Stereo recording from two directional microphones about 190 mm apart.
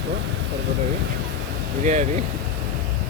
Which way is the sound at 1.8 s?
40° right (ahead or behind).